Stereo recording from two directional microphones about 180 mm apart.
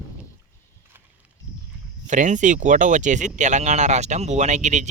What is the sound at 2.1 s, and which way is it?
Speech, 45° right (ahead or behind).